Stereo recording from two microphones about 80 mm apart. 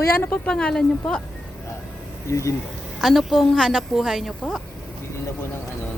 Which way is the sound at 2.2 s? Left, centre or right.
Left.